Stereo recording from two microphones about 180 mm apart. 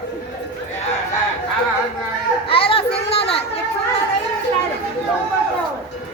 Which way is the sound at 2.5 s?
30° left (ahead or behind).